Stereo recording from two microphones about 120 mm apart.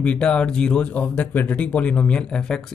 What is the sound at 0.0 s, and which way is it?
Speech, 10° left (ahead or behind).